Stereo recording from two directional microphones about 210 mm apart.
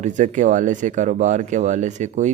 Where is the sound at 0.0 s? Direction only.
35° right (ahead or behind).